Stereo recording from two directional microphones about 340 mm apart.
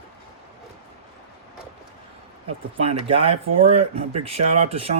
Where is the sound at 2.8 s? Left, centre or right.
Centre.